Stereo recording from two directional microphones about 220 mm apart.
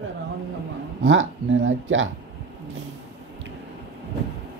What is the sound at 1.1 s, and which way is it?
Speech, 60° right (ahead or behind).